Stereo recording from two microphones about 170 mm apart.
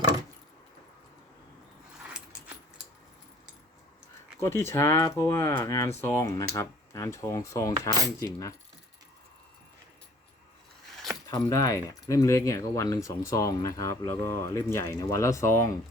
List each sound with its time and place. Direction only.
4.4 s speech: 15° left (ahead or behind)
11.3 s speech: 20° left (ahead or behind)